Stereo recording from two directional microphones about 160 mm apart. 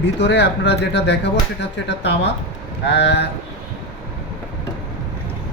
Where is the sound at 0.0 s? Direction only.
90° left.